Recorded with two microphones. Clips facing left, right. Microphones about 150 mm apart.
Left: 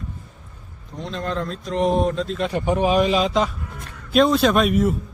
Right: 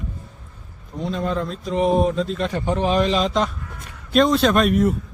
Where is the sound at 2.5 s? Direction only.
15° left (ahead or behind).